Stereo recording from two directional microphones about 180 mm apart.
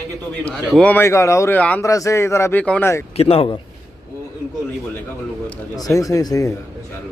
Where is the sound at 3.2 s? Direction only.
30° left (ahead or behind).